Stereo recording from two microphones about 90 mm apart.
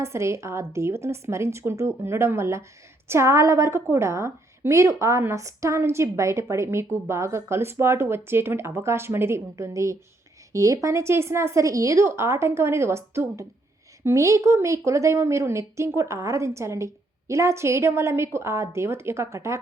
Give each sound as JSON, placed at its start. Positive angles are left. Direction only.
{"t": 0.0, "sound": "a woman's voice", "side_deg": -30}